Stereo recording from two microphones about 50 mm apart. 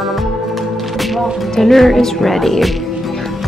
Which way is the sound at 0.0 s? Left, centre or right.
Centre.